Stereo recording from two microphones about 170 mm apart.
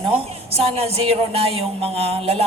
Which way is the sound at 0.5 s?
35° right (ahead or behind).